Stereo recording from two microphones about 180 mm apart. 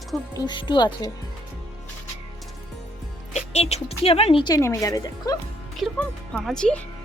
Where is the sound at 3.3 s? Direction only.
35° left (ahead or behind); by 5.4 s 20° left (ahead or behind).